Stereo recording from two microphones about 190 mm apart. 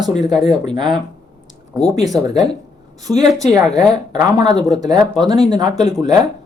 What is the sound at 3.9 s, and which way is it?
Speech, 20° right (ahead or behind).